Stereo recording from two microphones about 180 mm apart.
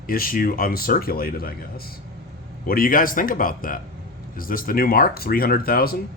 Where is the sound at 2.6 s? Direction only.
55° left (ahead or behind).